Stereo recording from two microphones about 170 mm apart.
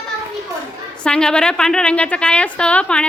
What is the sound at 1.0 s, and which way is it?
A woman's voice, 5° left (ahead or behind).